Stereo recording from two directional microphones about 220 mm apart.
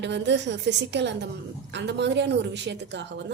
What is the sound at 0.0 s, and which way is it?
A woman's voice, 50° right (ahead or behind).